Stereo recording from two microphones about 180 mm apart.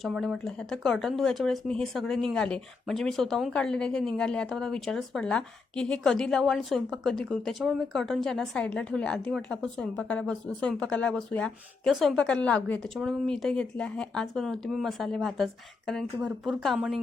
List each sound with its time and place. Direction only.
0.0 s speech: centre (ahead or behind)